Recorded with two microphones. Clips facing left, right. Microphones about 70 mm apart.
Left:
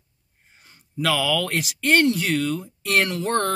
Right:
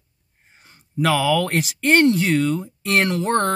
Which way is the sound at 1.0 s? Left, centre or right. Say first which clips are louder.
Right 4 dB; right.